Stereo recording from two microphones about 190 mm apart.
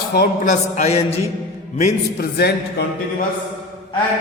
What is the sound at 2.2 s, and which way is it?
Speech, 60° left (ahead or behind).